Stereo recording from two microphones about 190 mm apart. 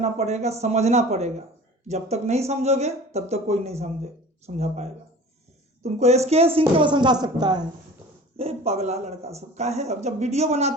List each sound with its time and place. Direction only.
0.0 s speech: 35° right (ahead or behind)
8.4 s speech: 30° right (ahead or behind)